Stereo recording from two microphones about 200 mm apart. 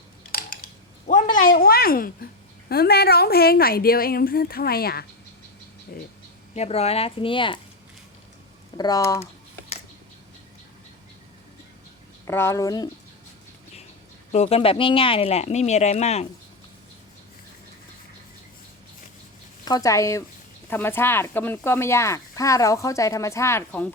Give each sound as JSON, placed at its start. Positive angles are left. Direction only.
{"t": 0.3, "sound": "a sound", "side_deg": 45}
{"t": 1.5, "sound": "speech", "side_deg": 50}
{"t": 6.5, "sound": "speech", "side_deg": 30}
{"t": 8.8, "sound": "speech", "side_deg": 15}
{"t": 12.2, "sound": "speech", "side_deg": 10}
{"t": 14.3, "sound": "speech", "side_deg": 30}
{"t": 19.6, "sound": "speech", "side_deg": 20}